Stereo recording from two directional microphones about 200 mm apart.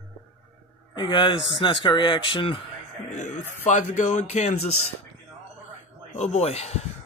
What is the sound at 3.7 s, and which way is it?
Speech, 40° left (ahead or behind).